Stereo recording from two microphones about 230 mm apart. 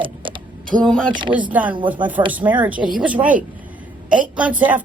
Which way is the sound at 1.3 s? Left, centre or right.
Centre.